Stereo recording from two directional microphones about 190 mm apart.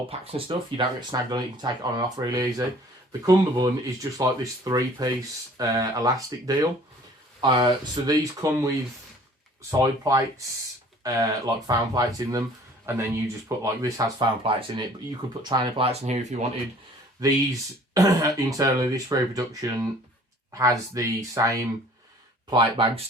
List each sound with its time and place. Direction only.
0.1 s speech: 30° right (ahead or behind)
9.7 s speech: 20° right (ahead or behind)
17.2 s speech: 20° right (ahead or behind)